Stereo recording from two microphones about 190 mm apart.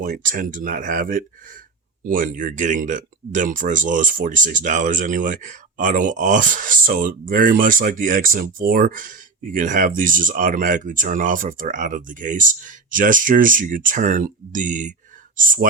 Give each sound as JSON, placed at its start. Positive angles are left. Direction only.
{"t": 0.0, "sound": "speech", "side_deg": -45}